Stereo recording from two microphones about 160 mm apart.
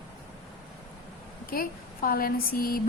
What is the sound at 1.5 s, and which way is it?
Speech, 65° left (ahead or behind).